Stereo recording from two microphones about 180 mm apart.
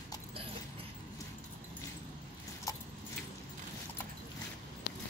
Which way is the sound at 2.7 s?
20° left (ahead or behind).